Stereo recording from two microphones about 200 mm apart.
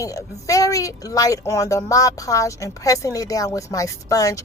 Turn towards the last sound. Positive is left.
turn(degrees=15)  # may be behind; listen again after turning